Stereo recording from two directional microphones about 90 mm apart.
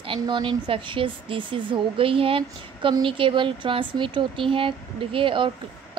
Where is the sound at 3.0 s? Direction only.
75° right (ahead or behind).